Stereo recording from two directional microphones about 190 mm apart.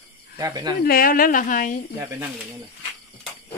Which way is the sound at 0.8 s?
50° left (ahead or behind).